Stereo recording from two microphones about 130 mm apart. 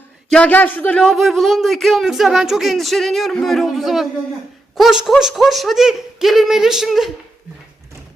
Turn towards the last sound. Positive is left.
turn(degrees=0)  # may be behind; listen again after turning